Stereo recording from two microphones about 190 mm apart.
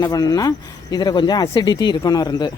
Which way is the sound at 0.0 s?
20° left (ahead or behind).